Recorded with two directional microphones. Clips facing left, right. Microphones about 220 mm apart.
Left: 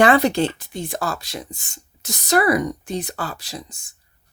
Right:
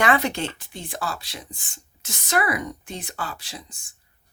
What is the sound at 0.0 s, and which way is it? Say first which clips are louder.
Speech: left 7 dB; 35° left (ahead or behind).